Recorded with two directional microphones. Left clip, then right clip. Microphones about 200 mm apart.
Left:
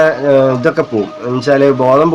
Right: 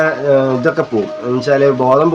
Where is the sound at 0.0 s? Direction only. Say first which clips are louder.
Left 3 dB; 30° left (ahead or behind).